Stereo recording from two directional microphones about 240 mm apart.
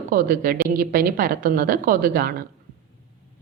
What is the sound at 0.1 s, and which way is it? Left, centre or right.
A woman's voice, right.